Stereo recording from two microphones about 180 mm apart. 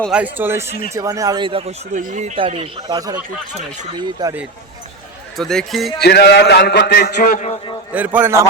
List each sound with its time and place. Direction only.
0.0 s speech: 5° right (ahead or behind); by 4.4 s 20° right (ahead or behind)
5.4 s a man's voice: centre (ahead or behind)
6.0 s a man's voice: 65° left (ahead or behind)
7.2 s a man's voice: 45° left (ahead or behind)
7.9 s speech: 10° right (ahead or behind)